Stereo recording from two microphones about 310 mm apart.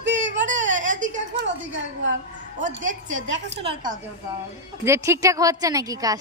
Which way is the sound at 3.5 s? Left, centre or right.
Centre.